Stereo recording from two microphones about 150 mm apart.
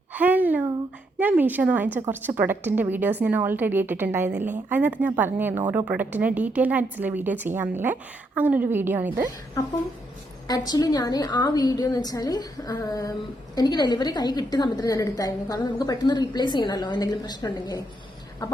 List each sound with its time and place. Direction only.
0.1 s a sound: 10° right (ahead or behind)
1.2 s a woman's voice: 10° right (ahead or behind)
10.7 s a woman's voice: 25° left (ahead or behind)